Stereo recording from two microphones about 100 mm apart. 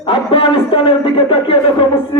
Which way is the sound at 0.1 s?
60° left (ahead or behind).